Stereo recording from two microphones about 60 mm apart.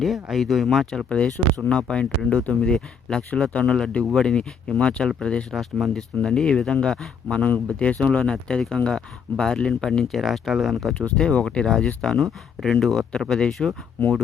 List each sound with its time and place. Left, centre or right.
0.0 s speech: centre
5.5 s speech: centre
7.3 s speech: centre
10.0 s speech: centre
10.9 s speech: centre